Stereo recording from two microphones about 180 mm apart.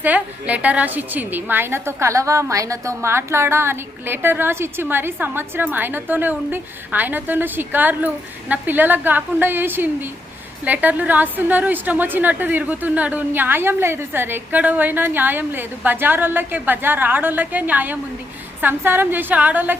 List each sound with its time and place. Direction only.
0.0 s a woman's voice: 10° right (ahead or behind)